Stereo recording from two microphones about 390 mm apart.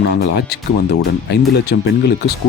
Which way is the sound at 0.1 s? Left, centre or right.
Left.